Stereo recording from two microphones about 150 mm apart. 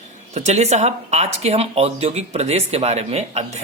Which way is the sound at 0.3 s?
50° right (ahead or behind).